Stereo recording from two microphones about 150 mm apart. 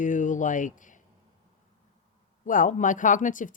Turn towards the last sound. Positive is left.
turn(degrees=60)  # may be behind; listen again after turning